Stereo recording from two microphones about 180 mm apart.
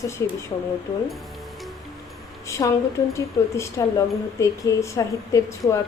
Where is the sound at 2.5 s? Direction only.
15° left (ahead or behind).